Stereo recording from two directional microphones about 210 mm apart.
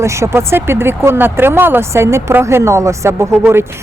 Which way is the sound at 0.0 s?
15° right (ahead or behind).